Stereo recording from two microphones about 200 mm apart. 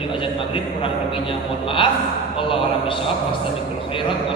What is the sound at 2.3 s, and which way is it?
Mantra, 25° left (ahead or behind).